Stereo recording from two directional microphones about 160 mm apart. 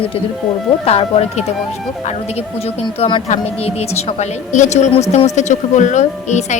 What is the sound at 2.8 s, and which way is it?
A woman's voice, 30° left (ahead or behind).